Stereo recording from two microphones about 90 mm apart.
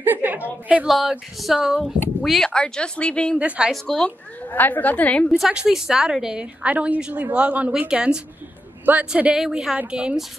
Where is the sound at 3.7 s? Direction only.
5° left (ahead or behind).